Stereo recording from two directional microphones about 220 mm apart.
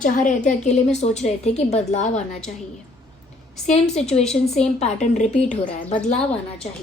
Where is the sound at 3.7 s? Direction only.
30° left (ahead or behind).